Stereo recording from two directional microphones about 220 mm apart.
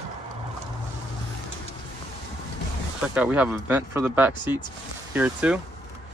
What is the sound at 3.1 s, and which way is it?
Speech, 5° right (ahead or behind).